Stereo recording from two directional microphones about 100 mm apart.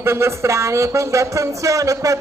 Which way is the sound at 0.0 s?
25° right (ahead or behind).